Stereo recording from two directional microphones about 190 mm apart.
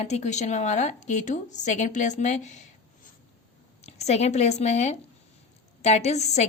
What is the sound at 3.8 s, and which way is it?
A woman's voice, 35° left (ahead or behind).